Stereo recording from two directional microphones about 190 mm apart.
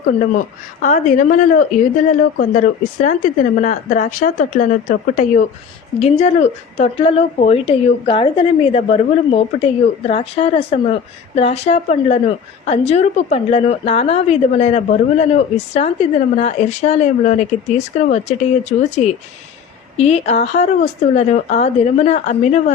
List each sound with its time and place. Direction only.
0.8 s a woman's voice: 40° left (ahead or behind)
6.0 s a woman's voice: 35° left (ahead or behind)
20.0 s a woman's voice: 35° left (ahead or behind)